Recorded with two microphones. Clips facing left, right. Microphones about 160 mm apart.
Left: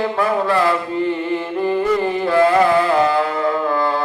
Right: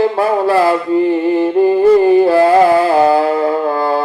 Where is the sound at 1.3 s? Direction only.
35° right (ahead or behind).